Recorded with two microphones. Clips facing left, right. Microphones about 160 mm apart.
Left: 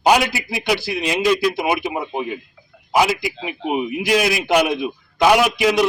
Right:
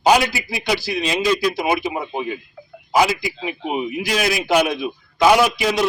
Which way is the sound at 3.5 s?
10° left (ahead or behind).